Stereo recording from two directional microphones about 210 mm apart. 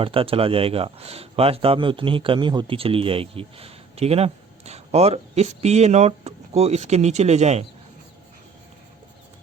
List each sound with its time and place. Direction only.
0.0 s speech: 25° right (ahead or behind)